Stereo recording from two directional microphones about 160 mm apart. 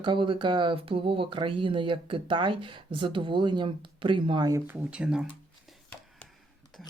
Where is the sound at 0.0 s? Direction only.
30° right (ahead or behind).